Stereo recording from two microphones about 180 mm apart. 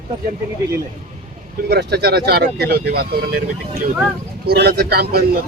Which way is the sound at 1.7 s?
65° right (ahead or behind).